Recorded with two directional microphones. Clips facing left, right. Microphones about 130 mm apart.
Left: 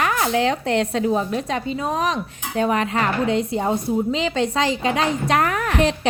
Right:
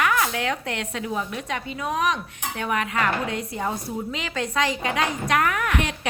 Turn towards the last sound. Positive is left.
turn(degrees=35)  # may be behind; listen again after turning